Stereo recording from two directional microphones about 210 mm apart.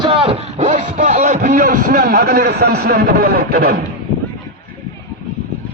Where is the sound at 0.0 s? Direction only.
25° right (ahead or behind); by 3.8 s 45° right (ahead or behind).